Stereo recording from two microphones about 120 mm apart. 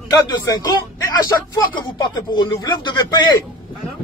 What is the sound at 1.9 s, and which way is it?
A man's voice, 35° left (ahead or behind).